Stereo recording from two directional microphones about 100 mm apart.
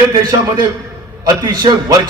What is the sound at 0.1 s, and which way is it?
A man's voice, 40° right (ahead or behind).